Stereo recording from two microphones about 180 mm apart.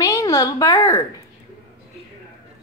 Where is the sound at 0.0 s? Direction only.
20° left (ahead or behind).